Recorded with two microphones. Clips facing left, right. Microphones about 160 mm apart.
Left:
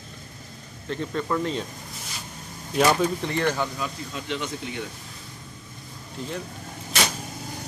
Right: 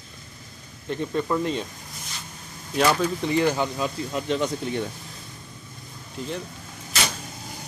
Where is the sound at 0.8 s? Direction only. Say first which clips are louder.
Right 2 dB; 10° right (ahead or behind).